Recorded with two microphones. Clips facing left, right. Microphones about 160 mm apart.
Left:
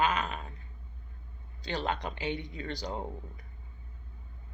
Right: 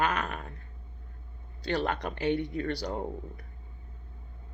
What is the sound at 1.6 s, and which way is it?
A man's voice, 60° right (ahead or behind).